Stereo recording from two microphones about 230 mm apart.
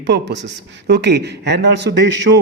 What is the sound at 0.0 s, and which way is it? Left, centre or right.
A man's voice, right.